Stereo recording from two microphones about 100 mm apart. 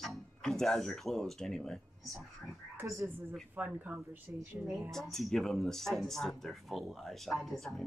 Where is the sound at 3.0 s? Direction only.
20° right (ahead or behind).